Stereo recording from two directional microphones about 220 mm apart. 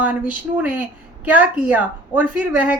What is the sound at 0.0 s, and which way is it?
A woman's voice, 5° right (ahead or behind).